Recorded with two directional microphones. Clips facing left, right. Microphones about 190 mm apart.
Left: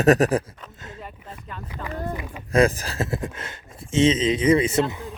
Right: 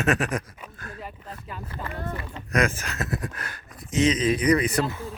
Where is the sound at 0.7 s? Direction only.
20° left (ahead or behind).